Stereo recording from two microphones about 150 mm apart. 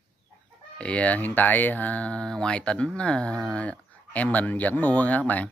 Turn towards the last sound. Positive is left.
turn(degrees=10)  # may be behind; listen again after turning